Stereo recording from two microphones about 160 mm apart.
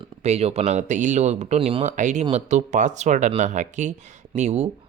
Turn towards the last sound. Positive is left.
turn(degrees=-45)  # may be behind; listen again after turning